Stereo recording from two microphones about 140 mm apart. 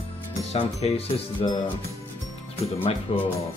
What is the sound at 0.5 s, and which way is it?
Speech, 50° left (ahead or behind).